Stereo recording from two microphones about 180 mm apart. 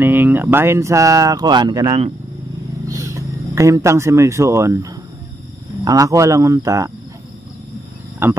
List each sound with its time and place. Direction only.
0.0 s speech: 10° right (ahead or behind)
8.2 s speech: 15° right (ahead or behind)